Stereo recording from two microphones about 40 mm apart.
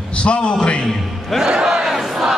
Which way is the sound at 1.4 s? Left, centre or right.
Centre.